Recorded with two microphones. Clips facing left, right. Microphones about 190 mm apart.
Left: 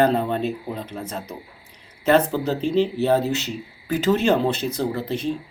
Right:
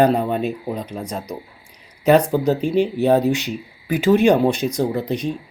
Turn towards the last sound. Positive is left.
turn(degrees=-15)  # may be behind; listen again after turning